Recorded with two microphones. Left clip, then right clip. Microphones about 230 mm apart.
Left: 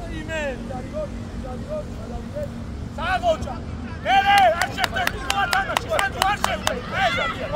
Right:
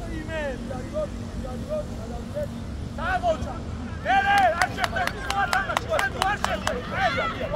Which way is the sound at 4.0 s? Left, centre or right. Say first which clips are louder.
Left 4 dB; left.